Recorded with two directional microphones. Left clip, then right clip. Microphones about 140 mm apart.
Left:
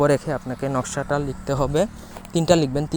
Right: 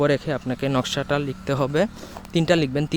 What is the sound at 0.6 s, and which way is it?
Speech, 30° right (ahead or behind).